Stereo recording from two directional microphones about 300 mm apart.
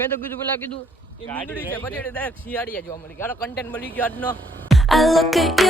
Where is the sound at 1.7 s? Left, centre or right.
Centre.